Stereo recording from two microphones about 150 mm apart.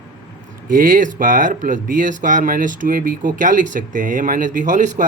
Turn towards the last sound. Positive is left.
turn(degrees=-55)  # may be behind; listen again after turning